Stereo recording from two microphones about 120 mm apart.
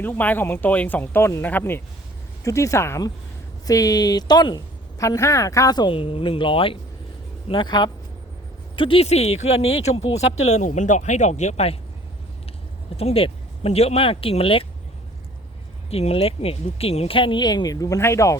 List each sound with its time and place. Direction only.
0.0 s speech: 15° left (ahead or behind); by 9.0 s 45° left (ahead or behind)
9.0 s speech: 65° left (ahead or behind)
13.0 s speech: 55° left (ahead or behind)
15.9 s speech: 55° left (ahead or behind); by 18.3 s 25° left (ahead or behind)